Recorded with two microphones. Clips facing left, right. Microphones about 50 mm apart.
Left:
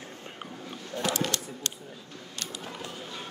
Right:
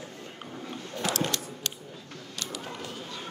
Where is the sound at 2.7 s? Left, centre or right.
Centre.